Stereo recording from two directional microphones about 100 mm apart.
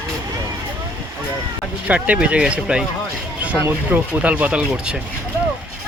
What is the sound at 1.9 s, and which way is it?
Speech, 10° right (ahead or behind).